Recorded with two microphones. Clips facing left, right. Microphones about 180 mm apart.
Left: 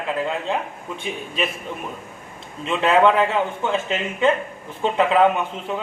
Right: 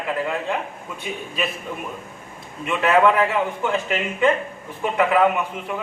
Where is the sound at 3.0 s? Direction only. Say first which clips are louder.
Left 1 dB; 25° left (ahead or behind).